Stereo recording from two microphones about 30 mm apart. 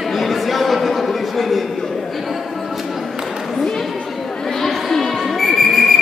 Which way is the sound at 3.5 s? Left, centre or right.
Centre.